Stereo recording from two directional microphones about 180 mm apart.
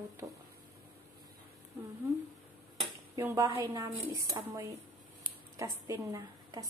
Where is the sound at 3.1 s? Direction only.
15° right (ahead or behind).